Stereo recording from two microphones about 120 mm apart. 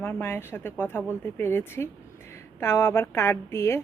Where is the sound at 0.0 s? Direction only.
20° left (ahead or behind).